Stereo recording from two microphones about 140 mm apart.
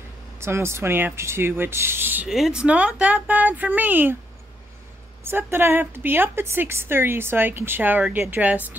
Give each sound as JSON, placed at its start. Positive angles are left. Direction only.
{"t": 0.4, "sound": "a woman's voice", "side_deg": -20}
{"t": 2.2, "sound": "a woman's voice", "side_deg": 0}
{"t": 5.2, "sound": "a woman's voice", "side_deg": -15}